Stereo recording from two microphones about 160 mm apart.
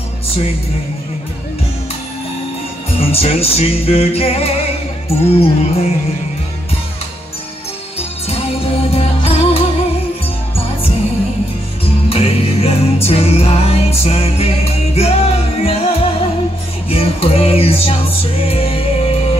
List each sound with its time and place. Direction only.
3.0 s music: 40° left (ahead or behind)
8.3 s music: 40° left (ahead or behind)
12.1 s music: 40° left (ahead or behind)